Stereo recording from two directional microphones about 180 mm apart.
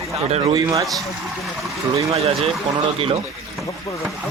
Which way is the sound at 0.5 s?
20° right (ahead or behind).